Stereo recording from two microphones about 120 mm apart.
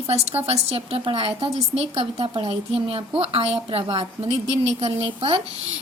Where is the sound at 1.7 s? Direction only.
55° right (ahead or behind).